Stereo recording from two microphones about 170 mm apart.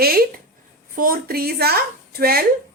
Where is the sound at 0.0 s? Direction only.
60° right (ahead or behind).